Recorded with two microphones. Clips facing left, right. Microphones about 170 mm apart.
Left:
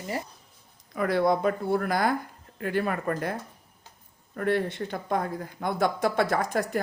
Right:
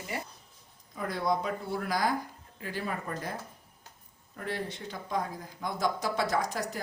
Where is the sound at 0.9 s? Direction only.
75° left (ahead or behind).